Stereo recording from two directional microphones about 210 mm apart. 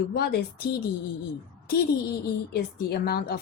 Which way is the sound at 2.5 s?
45° left (ahead or behind).